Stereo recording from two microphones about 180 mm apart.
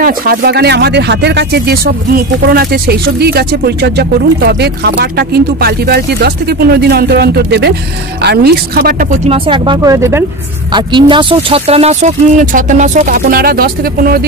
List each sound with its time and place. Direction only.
0.0 s speech: 60° right (ahead or behind)
9.2 s speech: 30° right (ahead or behind)
9.9 s speech: 15° right (ahead or behind)
10.7 s speech: 25° right (ahead or behind); by 14.2 s 55° right (ahead or behind)